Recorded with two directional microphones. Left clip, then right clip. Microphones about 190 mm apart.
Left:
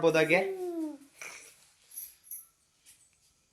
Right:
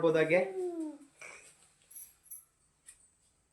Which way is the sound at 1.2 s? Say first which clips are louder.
Left 5 dB; 40° left (ahead or behind).